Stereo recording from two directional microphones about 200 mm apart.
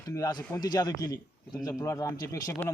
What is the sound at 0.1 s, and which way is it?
A man's voice, 20° left (ahead or behind).